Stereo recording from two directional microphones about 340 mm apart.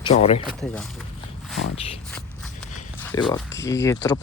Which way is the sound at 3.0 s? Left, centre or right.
Centre.